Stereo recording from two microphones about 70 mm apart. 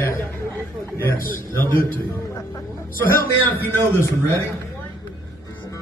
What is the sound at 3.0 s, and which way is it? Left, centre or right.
Speech, left.